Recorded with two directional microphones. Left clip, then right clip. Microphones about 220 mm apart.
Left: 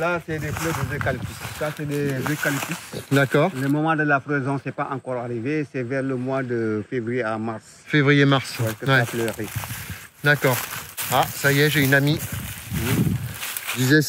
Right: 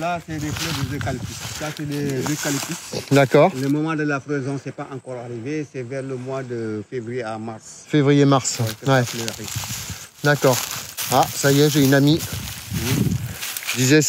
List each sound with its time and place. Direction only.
0.6 s speech: centre (ahead or behind)
2.0 s speech: centre (ahead or behind)
3.2 s speech: 40° right (ahead or behind)
3.5 s speech: centre (ahead or behind)
5.1 s speech: 30° left (ahead or behind)
7.9 s speech: 10° right (ahead or behind)
9.0 s speech: centre (ahead or behind)
10.2 s speech: 15° right (ahead or behind)
10.6 s a sound: 5° right (ahead or behind)
11.1 s speech: 25° right (ahead or behind)
12.7 s a sound: centre (ahead or behind)